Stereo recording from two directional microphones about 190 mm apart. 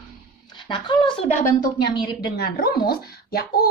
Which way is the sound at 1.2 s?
45° left (ahead or behind).